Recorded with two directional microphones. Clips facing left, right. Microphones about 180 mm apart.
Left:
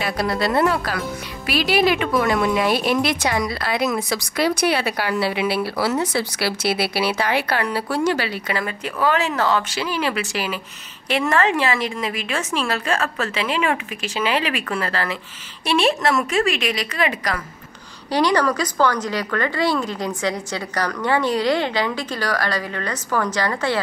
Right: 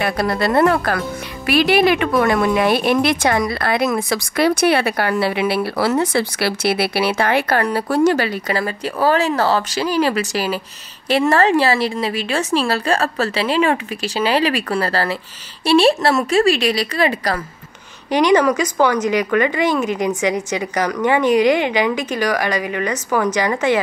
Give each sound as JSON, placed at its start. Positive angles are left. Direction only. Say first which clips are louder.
{"t": 0.0, "sound": "a woman's voice", "louder": "right 3 dB", "side_deg": -55}
{"t": 18.1, "sound": "speech", "louder": "right 5 dB", "side_deg": -20}